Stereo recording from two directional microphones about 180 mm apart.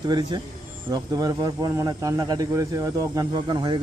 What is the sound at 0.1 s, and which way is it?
Speech, 25° right (ahead or behind).